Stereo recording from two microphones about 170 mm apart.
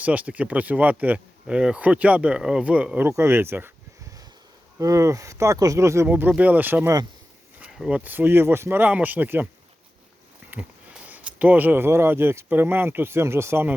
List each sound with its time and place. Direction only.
0.0 s speech: 10° right (ahead or behind)
4.8 s speech: 20° right (ahead or behind)
10.5 s a sound: 10° right (ahead or behind)
11.1 s speech: 10° right (ahead or behind)